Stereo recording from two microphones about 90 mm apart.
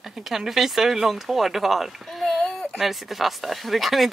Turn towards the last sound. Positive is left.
turn(degrees=0)  # may be behind; listen again after turning